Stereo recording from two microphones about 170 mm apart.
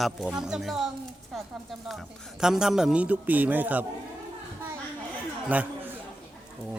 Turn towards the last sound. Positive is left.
turn(degrees=-10)  # may be behind; listen again after turning